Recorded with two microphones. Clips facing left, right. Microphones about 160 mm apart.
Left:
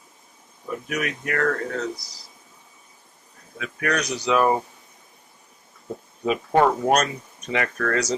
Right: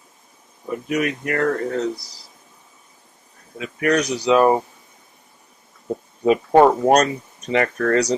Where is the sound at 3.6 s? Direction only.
25° right (ahead or behind).